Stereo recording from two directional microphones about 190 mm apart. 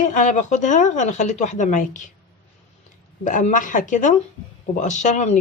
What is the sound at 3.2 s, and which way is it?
A woman's voice, 40° left (ahead or behind).